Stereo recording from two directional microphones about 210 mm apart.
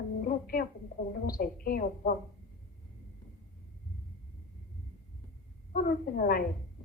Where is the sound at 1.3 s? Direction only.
45° left (ahead or behind).